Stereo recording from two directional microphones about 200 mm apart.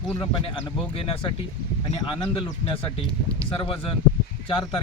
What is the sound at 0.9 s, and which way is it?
Speech, 25° left (ahead or behind).